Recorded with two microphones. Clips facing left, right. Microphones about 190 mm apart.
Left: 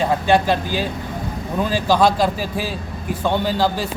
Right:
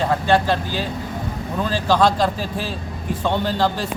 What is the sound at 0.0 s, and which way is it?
A man's voice, 15° left (ahead or behind).